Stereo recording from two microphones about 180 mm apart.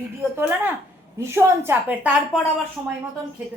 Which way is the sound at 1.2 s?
15° right (ahead or behind).